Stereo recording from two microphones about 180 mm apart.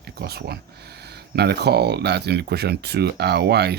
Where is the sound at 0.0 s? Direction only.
60° right (ahead or behind).